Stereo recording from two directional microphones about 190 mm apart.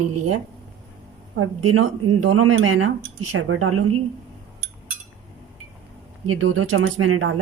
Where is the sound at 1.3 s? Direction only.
90° right.